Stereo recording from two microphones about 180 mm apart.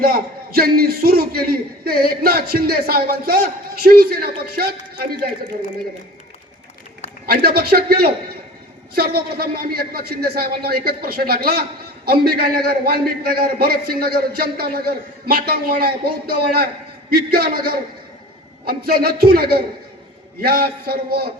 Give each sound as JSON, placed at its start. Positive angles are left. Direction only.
{"t": 0.0, "sound": "a man's voice", "side_deg": -55}
{"t": 7.3, "sound": "a man's voice", "side_deg": -60}